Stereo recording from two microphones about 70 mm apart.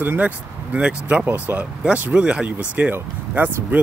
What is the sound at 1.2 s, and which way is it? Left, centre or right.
Speech, right.